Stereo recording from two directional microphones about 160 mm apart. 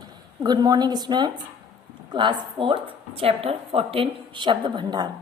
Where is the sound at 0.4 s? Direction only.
25° right (ahead or behind).